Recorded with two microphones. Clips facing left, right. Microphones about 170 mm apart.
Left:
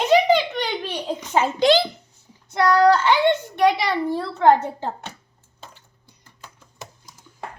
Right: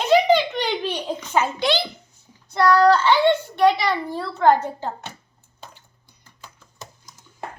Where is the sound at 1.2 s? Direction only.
20° left (ahead or behind).